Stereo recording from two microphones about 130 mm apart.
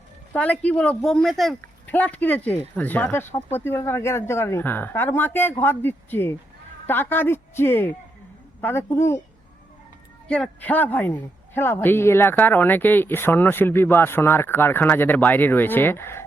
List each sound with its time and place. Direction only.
0.3 s a man's voice: 10° left (ahead or behind)
1.9 s a man's voice: 10° left (ahead or behind)
10.2 s a man's voice: 10° left (ahead or behind)